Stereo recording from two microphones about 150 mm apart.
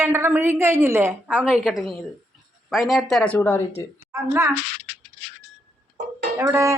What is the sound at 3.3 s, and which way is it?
Speech, 20° left (ahead or behind).